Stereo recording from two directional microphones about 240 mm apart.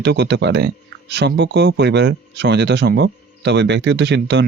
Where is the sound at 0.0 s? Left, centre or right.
Right.